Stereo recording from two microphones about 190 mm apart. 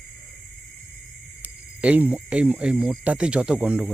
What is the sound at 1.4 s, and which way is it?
Speech, 10° right (ahead or behind).